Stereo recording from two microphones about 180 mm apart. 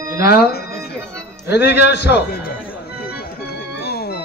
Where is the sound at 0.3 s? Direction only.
60° left (ahead or behind).